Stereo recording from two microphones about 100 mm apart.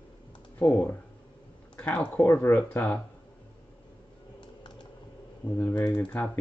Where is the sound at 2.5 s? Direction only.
30° left (ahead or behind).